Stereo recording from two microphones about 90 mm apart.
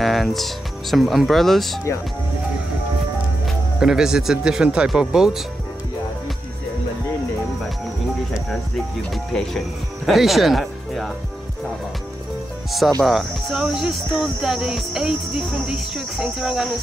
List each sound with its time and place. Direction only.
0.0 s speech: centre (ahead or behind)
3.4 s speech: 5° right (ahead or behind)
9.1 s speech: 5° left (ahead or behind)
13.0 s speech: 5° right (ahead or behind)